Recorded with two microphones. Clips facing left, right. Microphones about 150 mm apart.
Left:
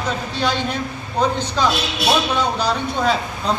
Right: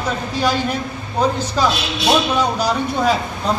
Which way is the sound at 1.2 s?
10° right (ahead or behind).